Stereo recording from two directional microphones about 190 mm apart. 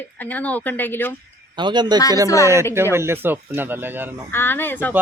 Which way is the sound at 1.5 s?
25° right (ahead or behind).